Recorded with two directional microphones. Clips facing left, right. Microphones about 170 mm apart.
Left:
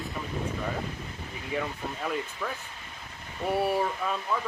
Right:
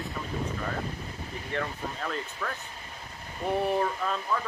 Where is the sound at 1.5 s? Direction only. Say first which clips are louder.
Left 1 dB; 10° left (ahead or behind).